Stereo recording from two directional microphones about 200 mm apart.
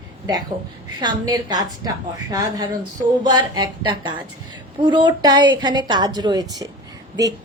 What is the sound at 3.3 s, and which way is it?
A woman's voice, 20° right (ahead or behind).